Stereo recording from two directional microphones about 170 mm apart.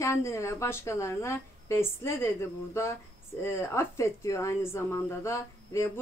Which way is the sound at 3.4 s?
15° left (ahead or behind).